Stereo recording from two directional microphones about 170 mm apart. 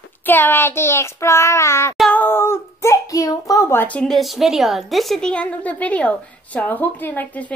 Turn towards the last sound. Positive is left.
turn(degrees=10)  # may be behind; listen again after turning